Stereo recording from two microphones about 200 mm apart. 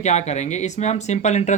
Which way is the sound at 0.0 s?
35° left (ahead or behind).